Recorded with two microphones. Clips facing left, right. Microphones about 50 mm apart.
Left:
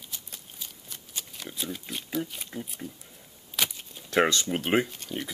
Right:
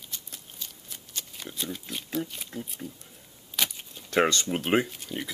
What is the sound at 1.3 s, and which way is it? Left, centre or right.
Speech, centre.